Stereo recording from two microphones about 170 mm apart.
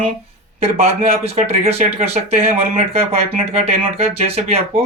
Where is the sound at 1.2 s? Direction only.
35° right (ahead or behind).